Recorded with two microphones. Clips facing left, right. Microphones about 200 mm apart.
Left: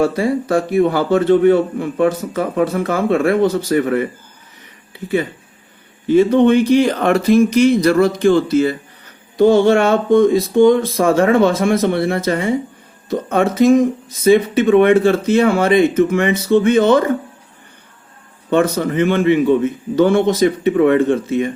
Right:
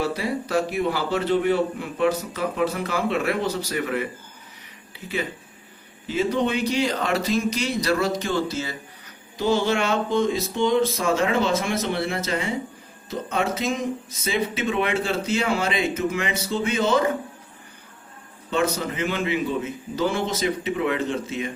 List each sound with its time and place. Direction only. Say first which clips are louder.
0.0 s speech: left 9 dB; 50° left (ahead or behind)
18.5 s speech: left 9 dB; 55° left (ahead or behind)